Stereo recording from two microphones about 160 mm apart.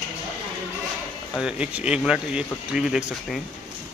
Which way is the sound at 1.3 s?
5° right (ahead or behind).